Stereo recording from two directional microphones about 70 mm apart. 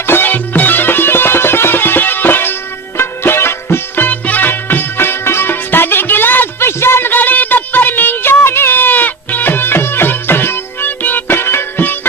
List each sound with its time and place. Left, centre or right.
0.1 s music: left